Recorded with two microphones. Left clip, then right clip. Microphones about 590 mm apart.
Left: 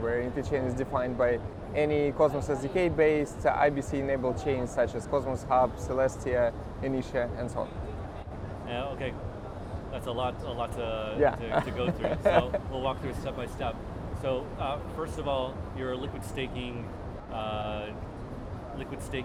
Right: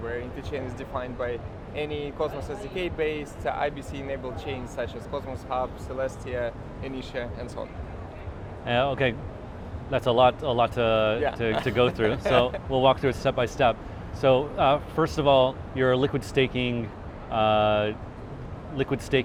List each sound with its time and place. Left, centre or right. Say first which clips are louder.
0.1 s speech: left 3 dB; left
8.6 s speech: right 11 dB; right
12.2 s speech: right 1 dB; left
12.7 s speech: right 11 dB; right